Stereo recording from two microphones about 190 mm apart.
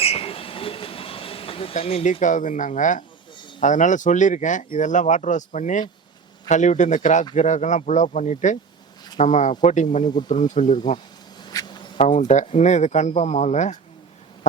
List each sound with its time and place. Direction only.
0.0 s train: 30° left (ahead or behind)
1.7 s speech: 30° left (ahead or behind)
11.4 s a sound: 25° left (ahead or behind)
12.0 s speech: 40° left (ahead or behind)